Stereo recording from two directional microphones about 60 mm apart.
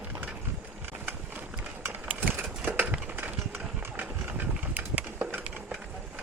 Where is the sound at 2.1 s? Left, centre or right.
Right.